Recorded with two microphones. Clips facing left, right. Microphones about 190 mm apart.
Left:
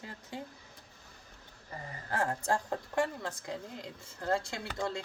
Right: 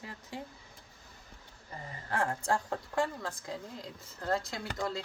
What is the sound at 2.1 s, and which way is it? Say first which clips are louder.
A woman's voice: even; 25° left (ahead or behind).